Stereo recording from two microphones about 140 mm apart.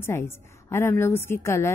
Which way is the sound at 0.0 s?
20° left (ahead or behind).